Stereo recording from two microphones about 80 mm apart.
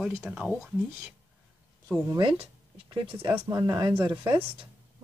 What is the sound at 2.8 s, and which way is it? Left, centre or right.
Speech, right.